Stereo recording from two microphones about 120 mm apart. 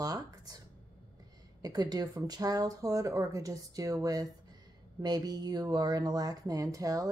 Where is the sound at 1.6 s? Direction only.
35° right (ahead or behind).